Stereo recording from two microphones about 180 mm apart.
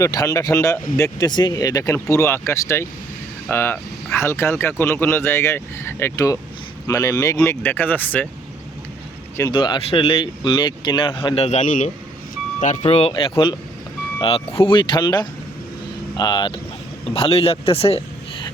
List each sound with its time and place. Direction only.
0.0 s speech: 20° left (ahead or behind)
9.5 s a man's voice: 25° left (ahead or behind)